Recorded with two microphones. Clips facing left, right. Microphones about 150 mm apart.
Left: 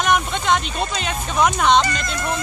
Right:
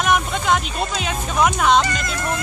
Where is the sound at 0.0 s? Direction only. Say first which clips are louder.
Even; 5° right (ahead or behind).